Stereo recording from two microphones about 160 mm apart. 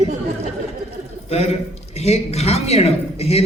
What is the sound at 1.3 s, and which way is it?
A man's voice, 40° left (ahead or behind).